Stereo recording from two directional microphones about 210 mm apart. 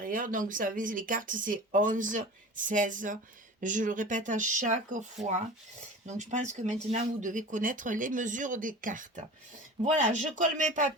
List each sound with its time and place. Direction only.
0.0 s speech: 40° right (ahead or behind)